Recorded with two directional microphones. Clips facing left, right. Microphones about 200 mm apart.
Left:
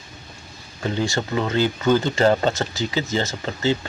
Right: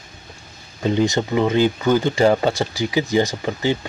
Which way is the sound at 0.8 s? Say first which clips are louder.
Right 5 dB; 20° right (ahead or behind).